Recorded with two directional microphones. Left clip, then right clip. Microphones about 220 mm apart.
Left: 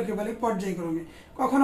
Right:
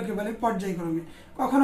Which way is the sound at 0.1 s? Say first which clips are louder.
Even; 10° right (ahead or behind).